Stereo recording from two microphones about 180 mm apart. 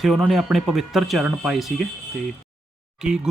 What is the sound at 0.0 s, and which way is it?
Speech, centre (ahead or behind).